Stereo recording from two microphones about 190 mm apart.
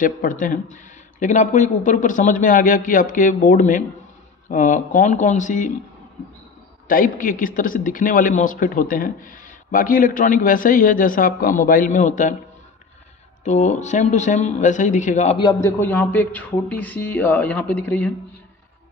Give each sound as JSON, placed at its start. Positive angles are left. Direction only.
{"t": 0.0, "sound": "speech", "side_deg": 45}
{"t": 6.9, "sound": "speech", "side_deg": 45}
{"t": 13.4, "sound": "speech", "side_deg": 40}
{"t": 15.3, "sound": "a man's voice", "side_deg": 25}
{"t": 15.8, "sound": "speech", "side_deg": 10}